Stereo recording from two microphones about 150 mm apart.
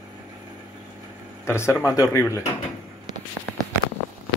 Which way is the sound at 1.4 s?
15° left (ahead or behind).